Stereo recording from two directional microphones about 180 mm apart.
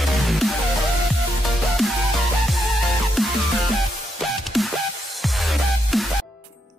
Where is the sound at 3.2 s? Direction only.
Centre (ahead or behind).